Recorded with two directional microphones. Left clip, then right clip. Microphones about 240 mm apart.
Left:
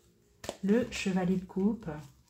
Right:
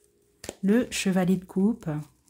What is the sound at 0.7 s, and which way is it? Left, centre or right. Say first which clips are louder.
Speech: right 5 dB; right.